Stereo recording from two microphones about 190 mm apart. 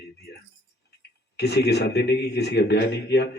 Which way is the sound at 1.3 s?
60° left (ahead or behind).